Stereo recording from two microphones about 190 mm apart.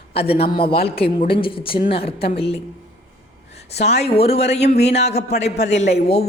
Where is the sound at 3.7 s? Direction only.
35° left (ahead or behind).